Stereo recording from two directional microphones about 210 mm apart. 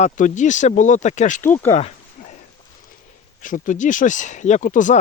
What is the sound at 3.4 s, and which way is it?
Speech, 40° left (ahead or behind).